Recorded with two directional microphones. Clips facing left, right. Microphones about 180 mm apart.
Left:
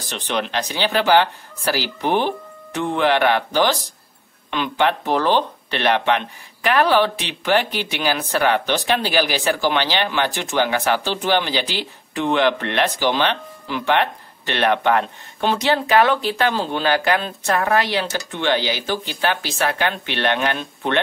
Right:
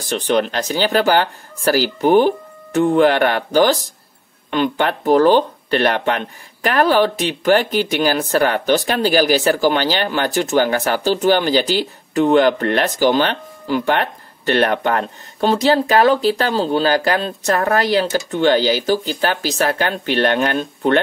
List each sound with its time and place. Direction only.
0.0 s speech: 45° right (ahead or behind)